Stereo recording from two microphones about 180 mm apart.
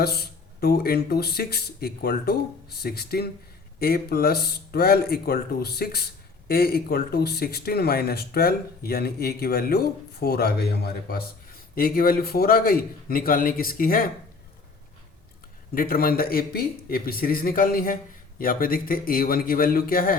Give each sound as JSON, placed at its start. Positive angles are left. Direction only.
{"t": 0.0, "sound": "a man's voice", "side_deg": 60}
{"t": 15.7, "sound": "a man's voice", "side_deg": 55}